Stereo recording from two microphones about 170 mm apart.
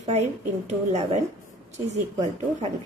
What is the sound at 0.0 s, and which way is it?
A woman's voice, 40° right (ahead or behind).